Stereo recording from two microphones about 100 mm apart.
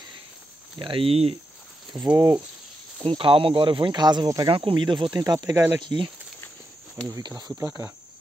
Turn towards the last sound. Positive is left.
turn(degrees=-45)  # may be behind; listen again after turning